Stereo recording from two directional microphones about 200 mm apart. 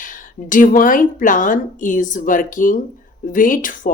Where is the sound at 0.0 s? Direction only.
40° left (ahead or behind).